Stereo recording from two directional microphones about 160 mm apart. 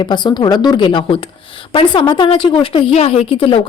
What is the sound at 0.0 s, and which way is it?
A woman's voice, 25° left (ahead or behind).